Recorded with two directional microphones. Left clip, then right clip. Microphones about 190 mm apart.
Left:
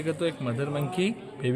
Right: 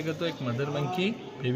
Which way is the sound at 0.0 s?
50° left (ahead or behind).